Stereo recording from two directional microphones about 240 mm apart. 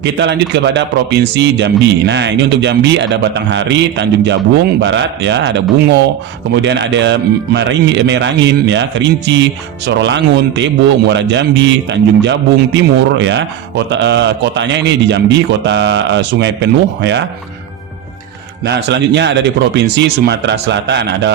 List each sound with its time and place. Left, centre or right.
0.0 s speech: right
18.6 s speech: right